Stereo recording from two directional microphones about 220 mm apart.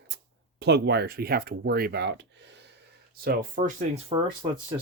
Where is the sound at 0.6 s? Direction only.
50° right (ahead or behind).